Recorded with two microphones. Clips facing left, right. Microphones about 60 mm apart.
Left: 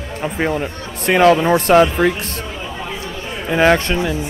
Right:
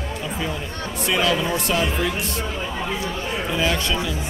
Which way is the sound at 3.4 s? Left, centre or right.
Left.